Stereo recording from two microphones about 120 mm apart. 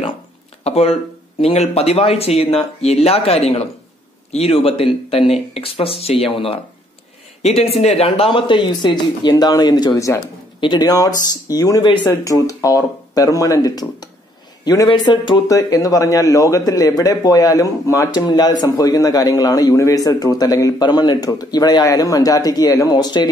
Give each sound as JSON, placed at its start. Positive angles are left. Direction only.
{"t": 0.7, "sound": "a man's voice", "side_deg": 60}
{"t": 15.4, "sound": "a man's voice", "side_deg": 30}